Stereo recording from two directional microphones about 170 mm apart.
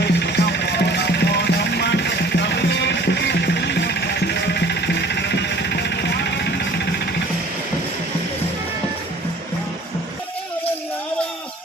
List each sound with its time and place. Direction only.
0.0 s music: 80° left